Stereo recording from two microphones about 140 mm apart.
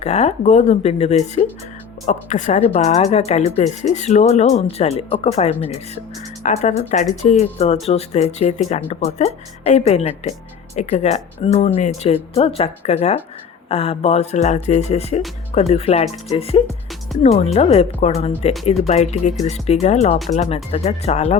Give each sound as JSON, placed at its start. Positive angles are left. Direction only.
{"t": 0.0, "sound": "a woman's voice", "side_deg": 50}